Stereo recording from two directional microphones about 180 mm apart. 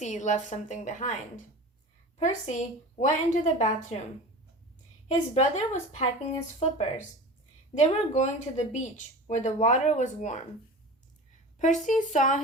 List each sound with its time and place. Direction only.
0.0 s speech: 40° left (ahead or behind)
2.1 s speech: 40° left (ahead or behind)
5.0 s speech: 40° left (ahead or behind)
7.7 s speech: 40° left (ahead or behind)
11.6 s speech: 45° left (ahead or behind)